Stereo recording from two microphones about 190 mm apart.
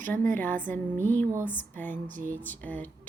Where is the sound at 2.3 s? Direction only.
10° left (ahead or behind).